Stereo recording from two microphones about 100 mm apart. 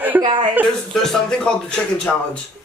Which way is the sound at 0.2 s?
55° right (ahead or behind).